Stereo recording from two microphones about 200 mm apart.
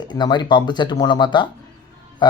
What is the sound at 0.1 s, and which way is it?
Speech, 20° left (ahead or behind).